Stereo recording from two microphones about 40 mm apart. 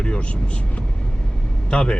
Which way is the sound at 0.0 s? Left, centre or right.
Left.